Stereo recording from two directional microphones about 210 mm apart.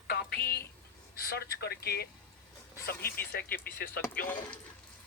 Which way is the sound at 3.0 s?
10° left (ahead or behind).